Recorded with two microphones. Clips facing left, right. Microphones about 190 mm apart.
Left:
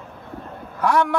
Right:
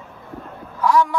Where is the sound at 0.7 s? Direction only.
65° left (ahead or behind).